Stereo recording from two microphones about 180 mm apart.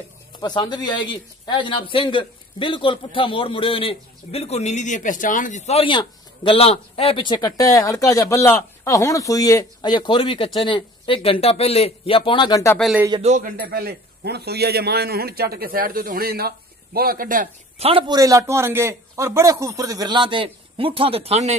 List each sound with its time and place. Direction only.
0.4 s speech: 25° left (ahead or behind)
12.7 s a man's voice: centre (ahead or behind)
13.2 s speech: 40° right (ahead or behind)
13.7 s a man's voice: 55° right (ahead or behind)
17.7 s a man's voice: 30° right (ahead or behind)